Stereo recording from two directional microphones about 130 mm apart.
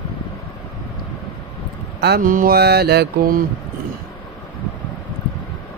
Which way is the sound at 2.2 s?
90° right.